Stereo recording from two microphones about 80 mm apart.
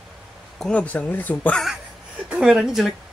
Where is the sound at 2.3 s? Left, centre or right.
Centre.